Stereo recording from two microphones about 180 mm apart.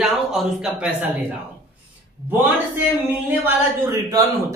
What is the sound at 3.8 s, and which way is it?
Speech, 20° right (ahead or behind).